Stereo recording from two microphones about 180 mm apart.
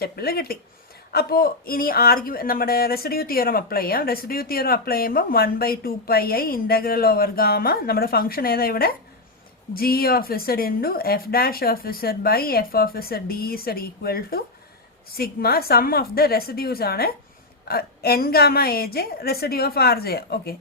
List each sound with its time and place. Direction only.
0.0 s speech: 60° left (ahead or behind)